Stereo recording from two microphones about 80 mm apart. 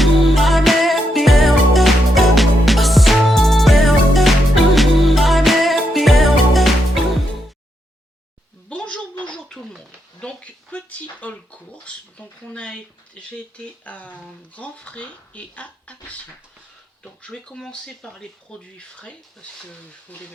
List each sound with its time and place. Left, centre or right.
0.0 s music: centre
8.7 s a sound: centre
13.8 s speech: centre